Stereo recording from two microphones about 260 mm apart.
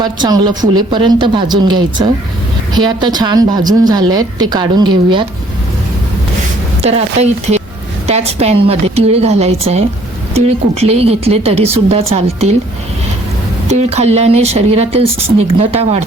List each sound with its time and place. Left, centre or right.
0.0 s speech: centre
6.8 s a woman's voice: right
13.7 s a woman's voice: right